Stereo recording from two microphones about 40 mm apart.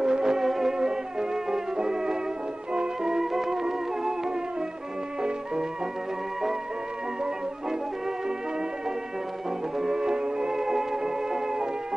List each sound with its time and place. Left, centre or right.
0.0 s music: centre
9.8 s music: centre